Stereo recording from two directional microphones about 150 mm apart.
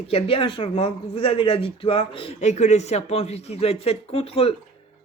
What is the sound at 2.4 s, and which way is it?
A man's voice, 50° left (ahead or behind).